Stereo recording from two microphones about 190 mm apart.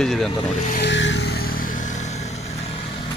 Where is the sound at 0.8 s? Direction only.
70° left (ahead or behind); by 3.0 s 30° left (ahead or behind).